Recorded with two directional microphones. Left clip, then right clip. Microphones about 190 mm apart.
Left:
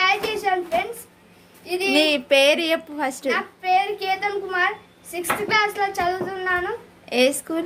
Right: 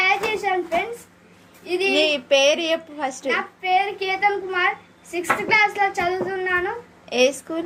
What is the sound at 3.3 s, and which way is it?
Speech, 10° left (ahead or behind).